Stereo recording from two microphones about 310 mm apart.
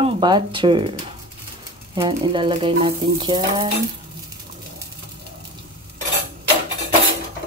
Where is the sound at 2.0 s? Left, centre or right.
Centre.